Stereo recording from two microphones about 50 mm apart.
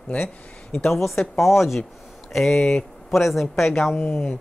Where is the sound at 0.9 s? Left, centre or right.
Centre.